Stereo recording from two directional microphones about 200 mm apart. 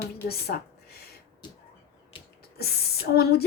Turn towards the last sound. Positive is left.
turn(degrees=50)  # may be behind; listen again after turning